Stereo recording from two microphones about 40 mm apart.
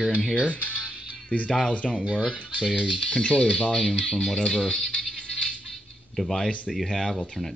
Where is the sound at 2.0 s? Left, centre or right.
Right.